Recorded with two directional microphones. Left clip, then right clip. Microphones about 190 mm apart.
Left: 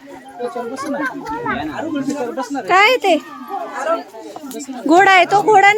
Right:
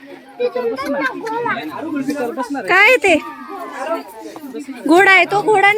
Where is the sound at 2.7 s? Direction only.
5° right (ahead or behind).